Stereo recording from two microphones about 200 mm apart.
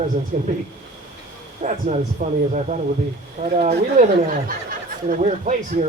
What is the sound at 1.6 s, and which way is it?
Speech, 35° right (ahead or behind).